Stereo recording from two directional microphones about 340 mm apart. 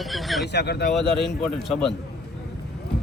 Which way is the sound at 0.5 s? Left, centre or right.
Left.